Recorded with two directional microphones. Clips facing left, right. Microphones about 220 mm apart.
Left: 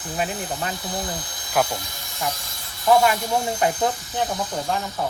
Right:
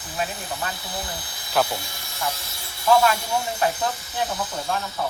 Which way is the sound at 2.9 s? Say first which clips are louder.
Left 1 dB; 15° left (ahead or behind).